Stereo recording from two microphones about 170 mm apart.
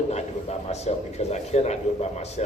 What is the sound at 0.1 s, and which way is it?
A man's voice, 40° left (ahead or behind).